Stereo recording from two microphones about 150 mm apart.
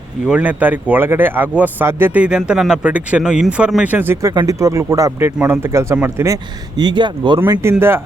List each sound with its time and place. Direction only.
0.3 s speech: 10° right (ahead or behind); by 7.3 s 30° right (ahead or behind)
7.3 s speech: 15° right (ahead or behind)